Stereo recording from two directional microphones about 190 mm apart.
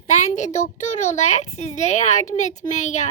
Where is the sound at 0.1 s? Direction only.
40° left (ahead or behind).